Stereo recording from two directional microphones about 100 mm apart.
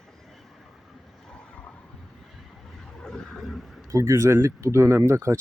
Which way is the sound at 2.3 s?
5° left (ahead or behind).